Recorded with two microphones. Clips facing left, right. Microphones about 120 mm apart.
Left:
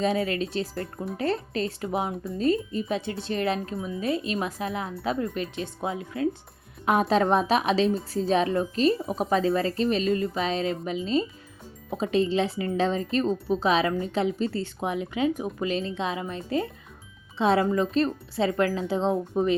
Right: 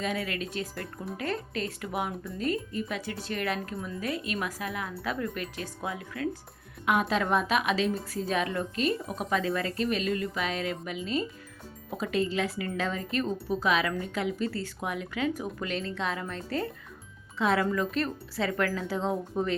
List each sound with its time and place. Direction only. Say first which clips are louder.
0.0 s a woman's voice: left 7 dB; 30° left (ahead or behind)
17.3 s speech: left 4 dB; 25° left (ahead or behind)